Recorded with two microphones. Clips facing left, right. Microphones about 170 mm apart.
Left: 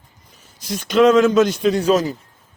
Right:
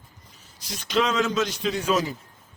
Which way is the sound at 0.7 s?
50° left (ahead or behind).